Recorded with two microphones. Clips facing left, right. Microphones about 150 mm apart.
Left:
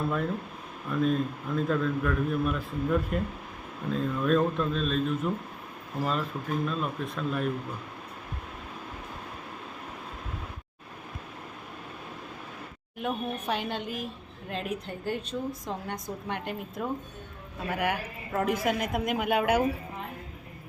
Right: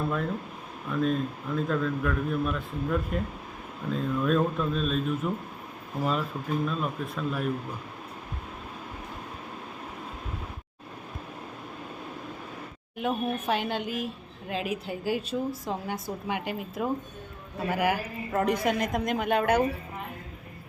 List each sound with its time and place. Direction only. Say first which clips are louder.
0.9 s a woman's voice: even; centre (ahead or behind)
13.0 s a woman's voice: right 3 dB; centre (ahead or behind)